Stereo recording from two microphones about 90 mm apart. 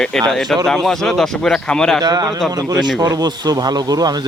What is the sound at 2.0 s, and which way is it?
Speech, 50° right (ahead or behind).